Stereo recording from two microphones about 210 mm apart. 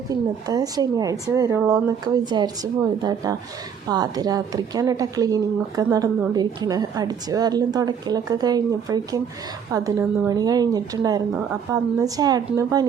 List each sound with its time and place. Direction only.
0.1 s speech: 20° right (ahead or behind)